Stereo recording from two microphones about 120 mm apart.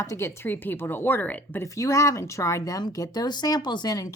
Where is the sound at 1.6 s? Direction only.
25° left (ahead or behind).